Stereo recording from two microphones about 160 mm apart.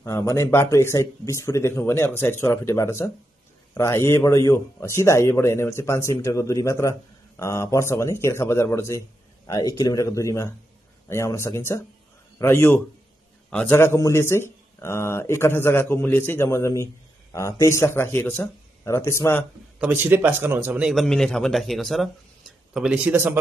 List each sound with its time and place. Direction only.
0.0 s speech: 20° left (ahead or behind)
19.8 s a man's voice: 15° right (ahead or behind)